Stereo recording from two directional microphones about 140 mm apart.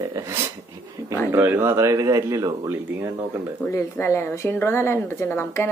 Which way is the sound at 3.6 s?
20° left (ahead or behind).